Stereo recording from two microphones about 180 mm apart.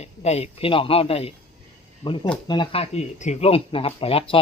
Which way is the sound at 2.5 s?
30° left (ahead or behind).